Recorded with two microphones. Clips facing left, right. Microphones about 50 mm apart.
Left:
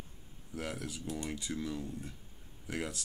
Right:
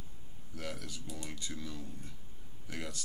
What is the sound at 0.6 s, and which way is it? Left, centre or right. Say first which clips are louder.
Speech: left 3 dB; left.